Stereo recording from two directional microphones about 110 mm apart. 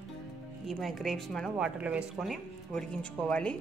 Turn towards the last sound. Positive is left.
turn(degrees=10)  # may be behind; listen again after turning